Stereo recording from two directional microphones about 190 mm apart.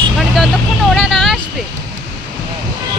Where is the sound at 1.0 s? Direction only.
Centre (ahead or behind).